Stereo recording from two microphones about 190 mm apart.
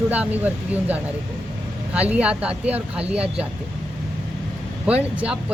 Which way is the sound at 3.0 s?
30° right (ahead or behind).